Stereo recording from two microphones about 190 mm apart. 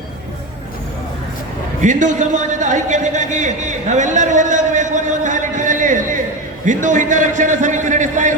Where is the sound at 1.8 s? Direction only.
40° right (ahead or behind).